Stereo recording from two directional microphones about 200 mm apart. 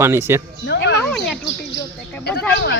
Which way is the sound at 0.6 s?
60° left (ahead or behind).